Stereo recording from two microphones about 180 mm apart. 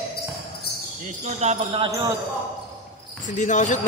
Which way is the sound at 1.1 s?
40° right (ahead or behind).